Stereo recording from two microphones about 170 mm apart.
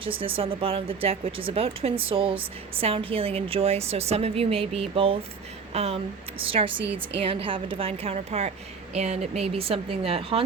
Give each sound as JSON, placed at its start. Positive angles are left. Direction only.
{"t": 0.0, "sound": "speech", "side_deg": -30}
{"t": 7.3, "sound": "speech", "side_deg": -30}